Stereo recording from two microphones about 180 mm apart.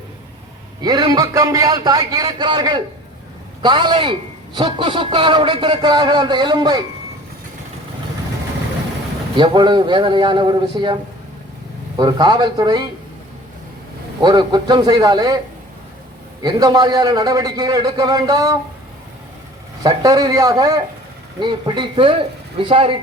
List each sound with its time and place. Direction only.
0.8 s a man's voice: 25° right (ahead or behind)
9.3 s a man's voice: 25° right (ahead or behind)
11.9 s a man's voice: 25° right (ahead or behind)
14.2 s a man's voice: 25° right (ahead or behind)
16.4 s a man's voice: 20° right (ahead or behind)
19.8 s a man's voice: 20° right (ahead or behind)